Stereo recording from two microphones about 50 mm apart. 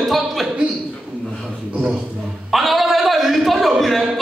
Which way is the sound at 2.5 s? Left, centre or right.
Centre.